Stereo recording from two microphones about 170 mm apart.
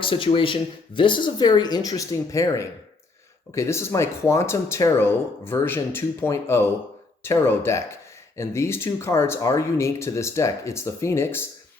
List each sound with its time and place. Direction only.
0.0 s speech: 30° left (ahead or behind); by 11.4 s 15° left (ahead or behind)